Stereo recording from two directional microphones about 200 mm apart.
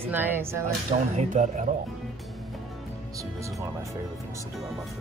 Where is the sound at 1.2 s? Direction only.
35° right (ahead or behind).